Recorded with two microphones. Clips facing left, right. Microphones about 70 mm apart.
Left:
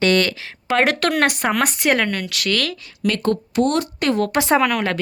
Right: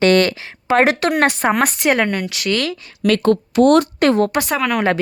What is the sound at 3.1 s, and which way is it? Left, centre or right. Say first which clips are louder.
Speech: right 5 dB; right.